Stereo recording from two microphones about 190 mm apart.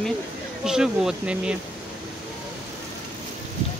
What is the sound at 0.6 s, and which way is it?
Speech, 5° right (ahead or behind).